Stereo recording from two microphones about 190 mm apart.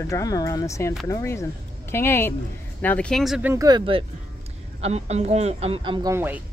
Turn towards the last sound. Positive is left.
turn(degrees=-10)  # may be behind; listen again after turning